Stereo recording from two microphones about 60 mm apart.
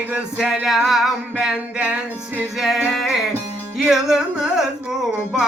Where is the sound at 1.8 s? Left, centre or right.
Right.